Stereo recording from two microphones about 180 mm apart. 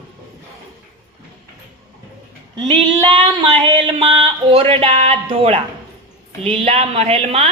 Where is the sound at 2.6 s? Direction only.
20° right (ahead or behind).